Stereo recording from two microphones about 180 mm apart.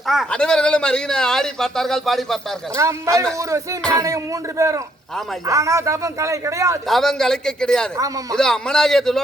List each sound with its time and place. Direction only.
0.1 s speech: centre (ahead or behind)
2.7 s a man's voice: 15° right (ahead or behind)
6.8 s speech: centre (ahead or behind)
7.9 s speech: 20° right (ahead or behind)
8.4 s speech: 5° left (ahead or behind)